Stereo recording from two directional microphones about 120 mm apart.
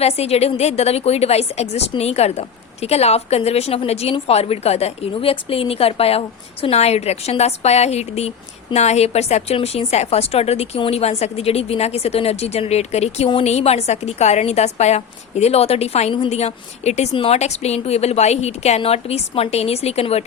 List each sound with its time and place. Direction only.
0.0 s a woman's voice: 60° left (ahead or behind)